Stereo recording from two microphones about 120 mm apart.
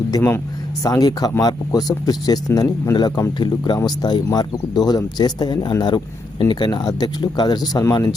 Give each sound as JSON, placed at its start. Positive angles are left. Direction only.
{"t": 0.1, "sound": "speech", "side_deg": 20}